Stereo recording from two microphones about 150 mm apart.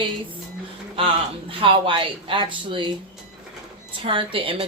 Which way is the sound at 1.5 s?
35° right (ahead or behind).